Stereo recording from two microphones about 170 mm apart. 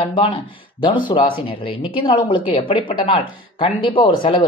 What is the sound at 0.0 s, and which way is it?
Speech, 30° left (ahead or behind).